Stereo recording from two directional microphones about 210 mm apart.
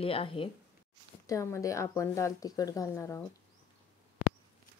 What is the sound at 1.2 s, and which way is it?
Speech, 15° left (ahead or behind).